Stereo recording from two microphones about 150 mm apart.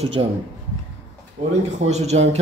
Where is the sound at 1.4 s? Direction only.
50° right (ahead or behind).